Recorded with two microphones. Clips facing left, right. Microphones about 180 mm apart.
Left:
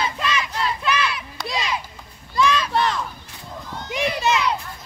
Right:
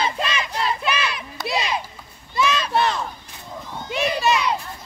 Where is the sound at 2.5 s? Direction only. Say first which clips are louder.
Even; 25° right (ahead or behind).